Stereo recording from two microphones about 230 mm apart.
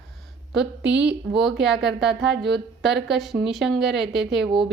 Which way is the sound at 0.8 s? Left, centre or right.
Right.